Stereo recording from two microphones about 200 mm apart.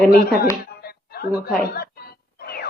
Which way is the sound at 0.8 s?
50° left (ahead or behind).